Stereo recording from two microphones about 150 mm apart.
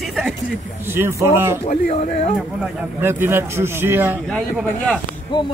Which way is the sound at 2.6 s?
15° right (ahead or behind).